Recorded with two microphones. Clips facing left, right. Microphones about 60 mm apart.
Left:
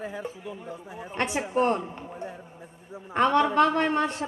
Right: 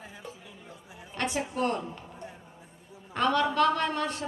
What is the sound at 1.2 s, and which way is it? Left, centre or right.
A woman's voice, left.